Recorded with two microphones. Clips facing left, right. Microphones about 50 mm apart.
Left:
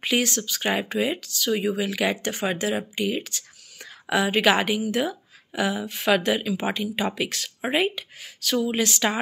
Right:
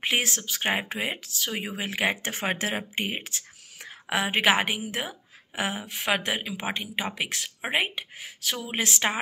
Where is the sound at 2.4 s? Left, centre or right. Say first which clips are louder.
Left 3 dB; right.